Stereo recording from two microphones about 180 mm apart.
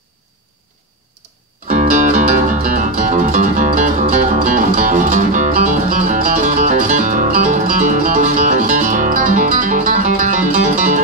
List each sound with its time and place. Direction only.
1.7 s music: 45° right (ahead or behind)